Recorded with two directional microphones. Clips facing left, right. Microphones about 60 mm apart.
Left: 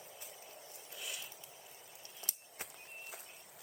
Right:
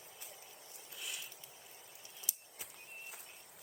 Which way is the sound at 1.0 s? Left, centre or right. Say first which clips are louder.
Even; centre.